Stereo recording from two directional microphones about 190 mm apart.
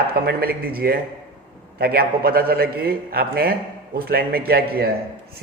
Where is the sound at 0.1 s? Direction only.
55° right (ahead or behind).